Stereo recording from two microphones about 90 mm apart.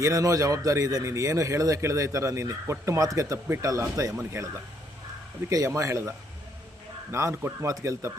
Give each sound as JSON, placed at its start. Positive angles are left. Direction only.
{"t": 0.0, "sound": "speech", "side_deg": -35}